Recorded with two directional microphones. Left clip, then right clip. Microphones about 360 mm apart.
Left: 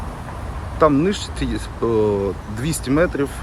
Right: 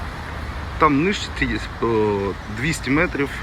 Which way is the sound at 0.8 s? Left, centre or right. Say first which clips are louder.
Left 1 dB; centre.